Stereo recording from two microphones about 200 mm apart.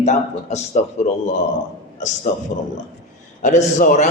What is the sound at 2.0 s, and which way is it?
Speech, 35° left (ahead or behind).